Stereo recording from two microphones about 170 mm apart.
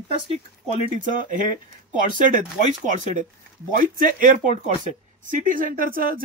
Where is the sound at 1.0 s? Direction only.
50° right (ahead or behind).